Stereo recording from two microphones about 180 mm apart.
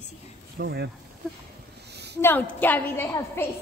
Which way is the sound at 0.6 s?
65° right (ahead or behind).